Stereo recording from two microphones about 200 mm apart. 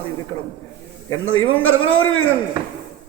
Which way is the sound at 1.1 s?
90° left.